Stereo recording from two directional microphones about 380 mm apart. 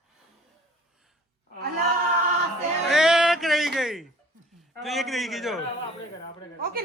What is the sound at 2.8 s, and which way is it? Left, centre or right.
Music, centre.